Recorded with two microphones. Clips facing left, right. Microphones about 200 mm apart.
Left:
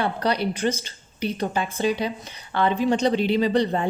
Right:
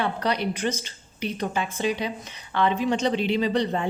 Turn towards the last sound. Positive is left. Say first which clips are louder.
# left 3 dB
turn(degrees=35)  # may be behind; listen again after turning